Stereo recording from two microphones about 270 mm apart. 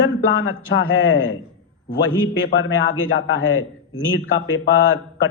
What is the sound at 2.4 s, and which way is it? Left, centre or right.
A man's voice, left.